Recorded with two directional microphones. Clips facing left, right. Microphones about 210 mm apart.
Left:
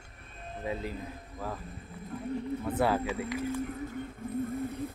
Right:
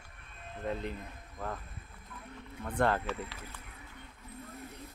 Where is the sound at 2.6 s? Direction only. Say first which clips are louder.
Left 1 dB; 5° left (ahead or behind).